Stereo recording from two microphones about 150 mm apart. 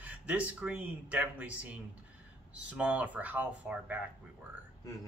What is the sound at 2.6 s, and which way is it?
A man's voice, 10° right (ahead or behind).